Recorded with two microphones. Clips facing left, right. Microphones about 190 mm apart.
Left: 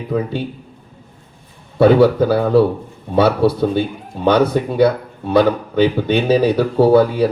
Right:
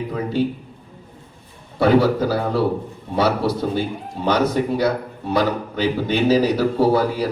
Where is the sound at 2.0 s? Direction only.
60° left (ahead or behind).